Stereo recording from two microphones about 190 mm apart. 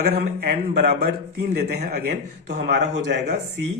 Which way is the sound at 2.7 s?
60° right (ahead or behind).